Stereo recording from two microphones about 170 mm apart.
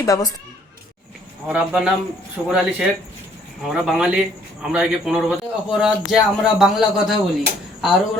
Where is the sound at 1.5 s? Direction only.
5° right (ahead or behind).